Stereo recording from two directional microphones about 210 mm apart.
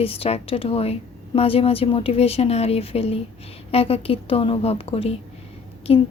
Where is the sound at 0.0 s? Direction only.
30° left (ahead or behind).